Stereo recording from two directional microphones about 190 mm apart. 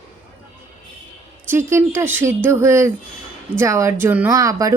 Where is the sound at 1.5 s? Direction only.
15° right (ahead or behind).